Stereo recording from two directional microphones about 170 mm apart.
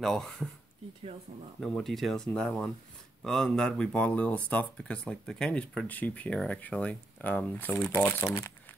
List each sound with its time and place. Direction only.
0.0 s speech: 5° left (ahead or behind)
1.6 s speech: centre (ahead or behind)